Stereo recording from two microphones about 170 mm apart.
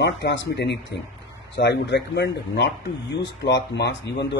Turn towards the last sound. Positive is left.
turn(degrees=85)